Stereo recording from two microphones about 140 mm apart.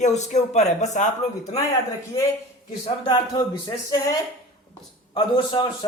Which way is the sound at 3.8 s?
25° left (ahead or behind).